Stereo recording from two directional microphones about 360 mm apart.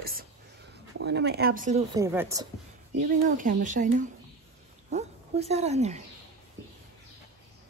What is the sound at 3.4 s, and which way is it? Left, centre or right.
Speech, right.